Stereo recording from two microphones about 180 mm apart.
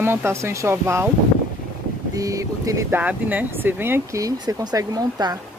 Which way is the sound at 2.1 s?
20° right (ahead or behind).